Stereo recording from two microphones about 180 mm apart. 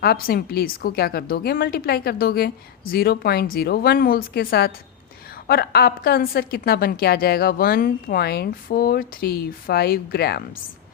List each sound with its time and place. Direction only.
0.0 s a woman's voice: 60° left (ahead or behind)